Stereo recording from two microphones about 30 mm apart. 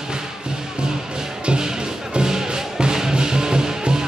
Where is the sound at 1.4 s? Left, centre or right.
Right.